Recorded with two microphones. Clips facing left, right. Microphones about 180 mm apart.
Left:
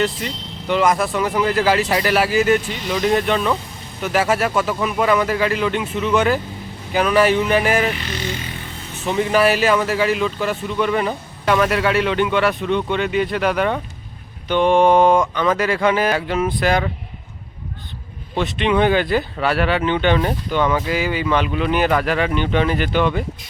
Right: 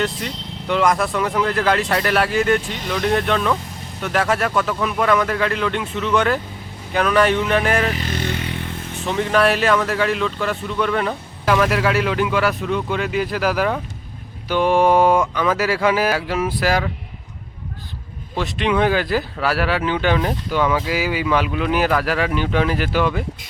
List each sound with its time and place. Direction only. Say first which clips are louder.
0.0 s speech: left 2 dB; centre (ahead or behind)
7.9 s vehicle: right 2 dB; 50° right (ahead or behind)
9.0 s speech: left 1 dB; 5° left (ahead or behind)
18.3 s speech: left 2 dB; centre (ahead or behind)